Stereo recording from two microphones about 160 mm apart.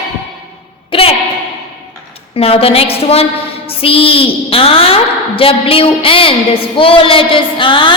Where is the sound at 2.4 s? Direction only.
40° left (ahead or behind).